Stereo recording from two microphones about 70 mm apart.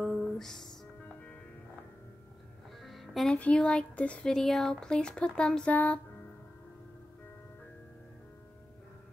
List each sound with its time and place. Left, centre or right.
0.0 s music: centre
2.8 s music: centre
3.3 s speech: centre
4.2 s speech: centre; by 5.9 s left